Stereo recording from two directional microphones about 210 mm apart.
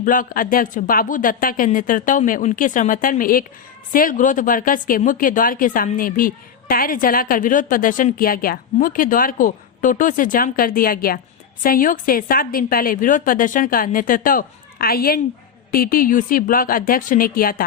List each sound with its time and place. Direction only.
0.0 s speech: 40° left (ahead or behind)